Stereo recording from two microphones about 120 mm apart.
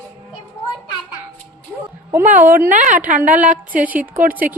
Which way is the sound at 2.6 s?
90° right.